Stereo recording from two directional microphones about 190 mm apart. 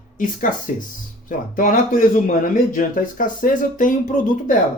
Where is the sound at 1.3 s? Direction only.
45° left (ahead or behind).